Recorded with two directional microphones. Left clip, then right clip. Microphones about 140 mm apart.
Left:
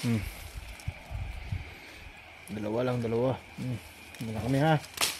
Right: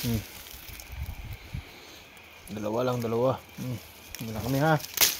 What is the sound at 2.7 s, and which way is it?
Speech, 10° left (ahead or behind).